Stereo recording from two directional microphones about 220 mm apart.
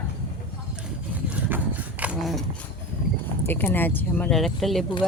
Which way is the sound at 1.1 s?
5° right (ahead or behind).